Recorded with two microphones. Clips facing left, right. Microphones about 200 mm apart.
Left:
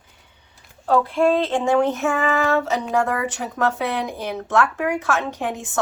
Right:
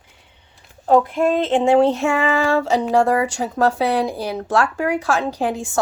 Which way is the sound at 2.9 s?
30° right (ahead or behind).